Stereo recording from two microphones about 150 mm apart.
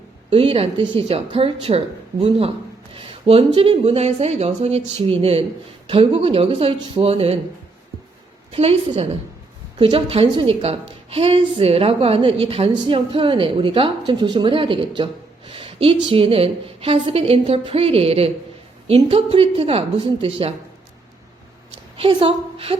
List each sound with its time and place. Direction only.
0.3 s a woman's voice: 40° right (ahead or behind)
2.9 s a woman's voice: 35° right (ahead or behind)
8.5 s a woman's voice: 40° right (ahead or behind)
21.7 s a woman's voice: 40° right (ahead or behind)